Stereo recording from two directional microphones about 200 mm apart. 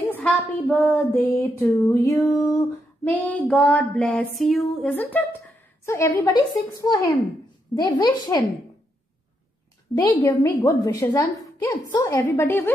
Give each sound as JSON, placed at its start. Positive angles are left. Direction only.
{"t": 0.0, "sound": "child singing", "side_deg": 10}
{"t": 3.0, "sound": "female singing", "side_deg": 5}
{"t": 5.9, "sound": "child singing", "side_deg": 15}
{"t": 7.7, "sound": "a woman's voice", "side_deg": 20}
{"t": 9.9, "sound": "child singing", "side_deg": 15}